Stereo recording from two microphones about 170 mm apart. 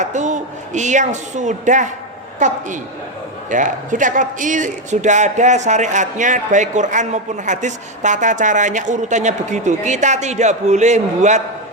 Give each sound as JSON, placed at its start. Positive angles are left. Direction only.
{"t": 0.0, "sound": "a woman's voice", "side_deg": -45}